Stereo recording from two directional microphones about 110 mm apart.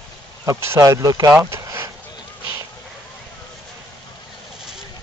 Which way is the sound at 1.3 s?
25° right (ahead or behind).